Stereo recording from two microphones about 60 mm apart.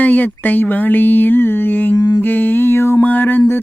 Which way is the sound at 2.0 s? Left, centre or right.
Left.